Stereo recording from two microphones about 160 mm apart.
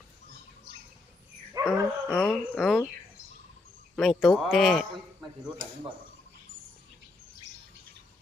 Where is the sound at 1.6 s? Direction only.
15° left (ahead or behind).